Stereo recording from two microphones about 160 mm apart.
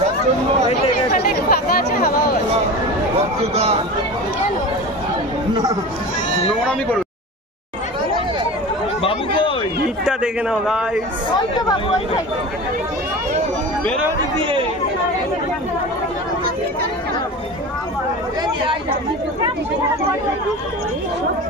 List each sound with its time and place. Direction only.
0.7 s speech: 40° left (ahead or behind)
1.5 s speech: 70° left (ahead or behind)
9.0 s chatter: 35° left (ahead or behind)
10.0 s a man's voice: 5° right (ahead or behind)